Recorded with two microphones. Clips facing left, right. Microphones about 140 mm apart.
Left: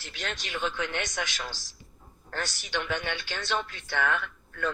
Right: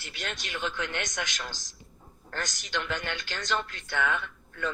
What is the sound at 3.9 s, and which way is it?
Speech, 5° right (ahead or behind).